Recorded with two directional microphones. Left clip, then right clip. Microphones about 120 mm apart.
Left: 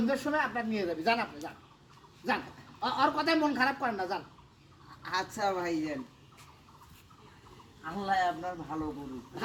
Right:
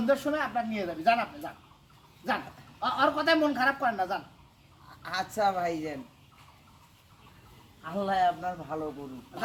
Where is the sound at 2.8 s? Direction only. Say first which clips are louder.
Right 2 dB; 5° right (ahead or behind).